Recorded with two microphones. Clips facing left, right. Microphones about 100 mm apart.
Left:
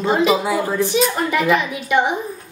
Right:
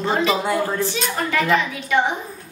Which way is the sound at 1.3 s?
15° left (ahead or behind).